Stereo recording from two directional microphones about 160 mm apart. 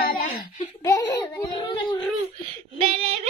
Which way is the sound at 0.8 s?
25° left (ahead or behind).